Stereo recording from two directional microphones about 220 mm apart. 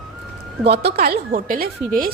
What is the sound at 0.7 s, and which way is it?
Speech, 45° right (ahead or behind).